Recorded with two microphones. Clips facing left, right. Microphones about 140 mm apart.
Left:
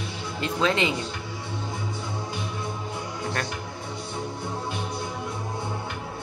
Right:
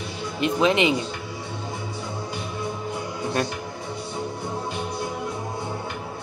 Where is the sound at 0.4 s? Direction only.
20° right (ahead or behind).